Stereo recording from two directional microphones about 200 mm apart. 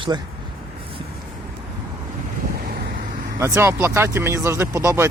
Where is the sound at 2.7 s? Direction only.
50° right (ahead or behind).